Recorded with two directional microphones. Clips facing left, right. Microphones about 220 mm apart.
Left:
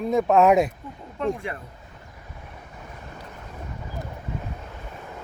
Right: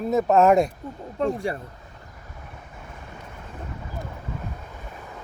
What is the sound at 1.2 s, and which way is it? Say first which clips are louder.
Speech: right 2 dB; 35° right (ahead or behind).